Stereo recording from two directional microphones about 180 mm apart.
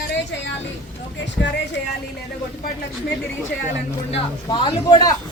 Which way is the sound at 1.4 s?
85° left.